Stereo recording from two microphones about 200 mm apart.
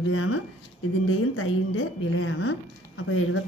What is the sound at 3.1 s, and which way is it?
Speech, 90° left.